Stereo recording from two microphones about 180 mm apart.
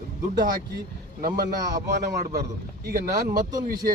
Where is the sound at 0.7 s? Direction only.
50° right (ahead or behind).